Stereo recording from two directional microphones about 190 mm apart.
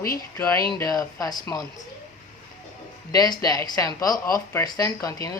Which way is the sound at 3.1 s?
20° left (ahead or behind).